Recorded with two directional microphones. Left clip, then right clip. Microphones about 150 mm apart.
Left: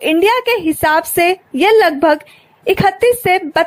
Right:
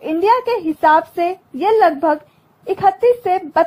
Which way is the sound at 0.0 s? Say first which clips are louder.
Left 3 dB; 35° left (ahead or behind).